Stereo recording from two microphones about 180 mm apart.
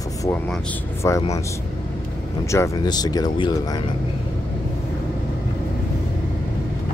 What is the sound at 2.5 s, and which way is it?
Speech, 20° left (ahead or behind).